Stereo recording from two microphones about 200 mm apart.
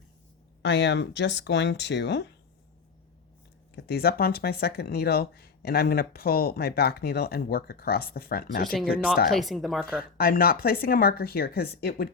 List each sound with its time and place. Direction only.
0.6 s speech: 60° left (ahead or behind)
3.8 s speech: 50° left (ahead or behind)
8.7 s speech: centre (ahead or behind)
10.0 s speech: 45° left (ahead or behind)